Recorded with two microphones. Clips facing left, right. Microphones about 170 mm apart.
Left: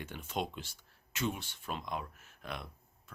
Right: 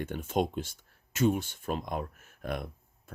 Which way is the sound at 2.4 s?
50° right (ahead or behind).